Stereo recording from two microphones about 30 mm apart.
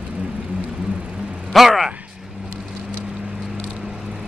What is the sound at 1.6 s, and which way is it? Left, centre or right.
Speech, centre.